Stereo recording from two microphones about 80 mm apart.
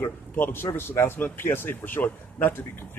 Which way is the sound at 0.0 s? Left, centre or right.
Left.